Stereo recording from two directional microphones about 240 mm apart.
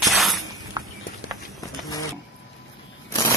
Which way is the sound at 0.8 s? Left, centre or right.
Centre.